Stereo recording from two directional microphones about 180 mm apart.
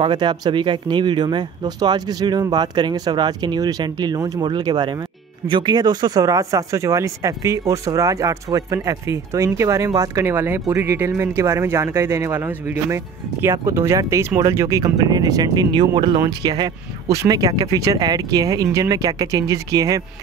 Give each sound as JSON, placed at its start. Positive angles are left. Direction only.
{"t": 0.0, "sound": "speech", "side_deg": -25}